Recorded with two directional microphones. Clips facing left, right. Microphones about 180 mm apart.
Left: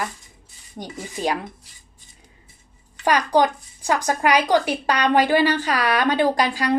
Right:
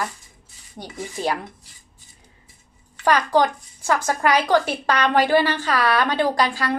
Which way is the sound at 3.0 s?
15° left (ahead or behind).